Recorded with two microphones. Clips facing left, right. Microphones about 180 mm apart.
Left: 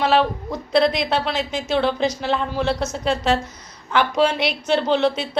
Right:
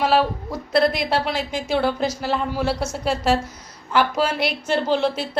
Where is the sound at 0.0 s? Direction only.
10° right (ahead or behind).